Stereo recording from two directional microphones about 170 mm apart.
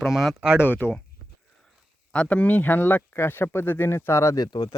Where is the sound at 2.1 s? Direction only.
5° left (ahead or behind).